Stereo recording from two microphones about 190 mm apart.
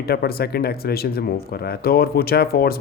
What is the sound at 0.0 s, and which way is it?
Speech, 55° left (ahead or behind).